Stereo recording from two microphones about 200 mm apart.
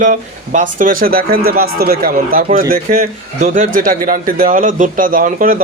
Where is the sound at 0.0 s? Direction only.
40° right (ahead or behind).